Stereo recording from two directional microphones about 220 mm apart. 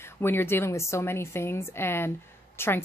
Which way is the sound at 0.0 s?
10° left (ahead or behind).